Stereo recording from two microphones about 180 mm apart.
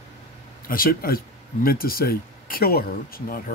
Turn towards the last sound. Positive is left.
turn(degrees=55)  # may be behind; listen again after turning